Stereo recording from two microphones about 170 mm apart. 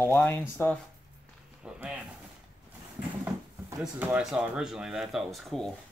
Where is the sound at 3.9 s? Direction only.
10° right (ahead or behind).